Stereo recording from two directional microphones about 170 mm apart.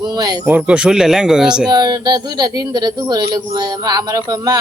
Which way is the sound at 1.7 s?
25° right (ahead or behind).